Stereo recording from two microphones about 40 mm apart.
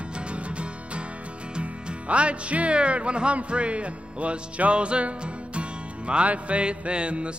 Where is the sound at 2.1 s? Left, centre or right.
Right.